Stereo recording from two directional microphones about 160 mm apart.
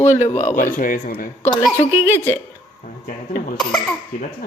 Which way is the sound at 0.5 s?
60° left (ahead or behind).